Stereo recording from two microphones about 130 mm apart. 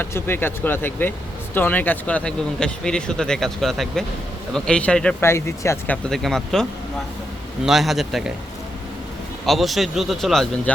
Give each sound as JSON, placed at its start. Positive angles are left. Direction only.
{"t": 0.0, "sound": "speech", "side_deg": 15}
{"t": 5.2, "sound": "speech", "side_deg": 20}
{"t": 6.1, "sound": "speech", "side_deg": 5}
{"t": 9.5, "sound": "speech", "side_deg": 0}